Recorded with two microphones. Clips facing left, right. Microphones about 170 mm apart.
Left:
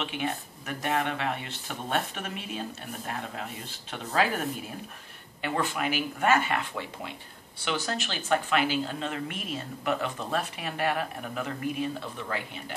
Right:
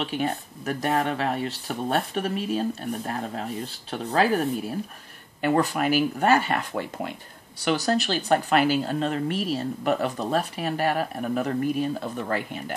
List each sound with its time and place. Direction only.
0.0 s speech: 40° right (ahead or behind)